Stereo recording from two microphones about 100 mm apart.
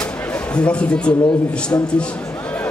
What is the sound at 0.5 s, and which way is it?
Speech, 10° left (ahead or behind).